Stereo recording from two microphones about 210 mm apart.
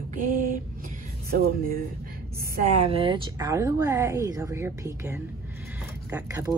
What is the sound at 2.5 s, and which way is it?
Speech, 30° right (ahead or behind).